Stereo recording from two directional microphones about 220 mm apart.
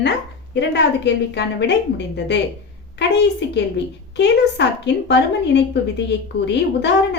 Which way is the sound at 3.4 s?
50° left (ahead or behind).